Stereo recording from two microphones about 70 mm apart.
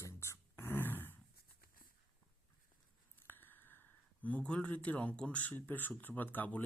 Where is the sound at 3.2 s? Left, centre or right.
Left.